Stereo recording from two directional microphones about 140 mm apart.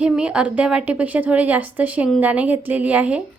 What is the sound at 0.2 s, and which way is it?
A woman's voice, 5° right (ahead or behind).